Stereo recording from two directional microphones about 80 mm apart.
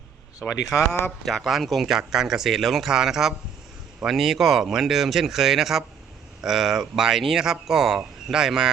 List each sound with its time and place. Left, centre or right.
0.4 s speech: left
1.2 s speech: centre